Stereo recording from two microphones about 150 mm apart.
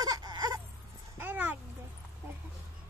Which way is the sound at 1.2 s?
10° right (ahead or behind).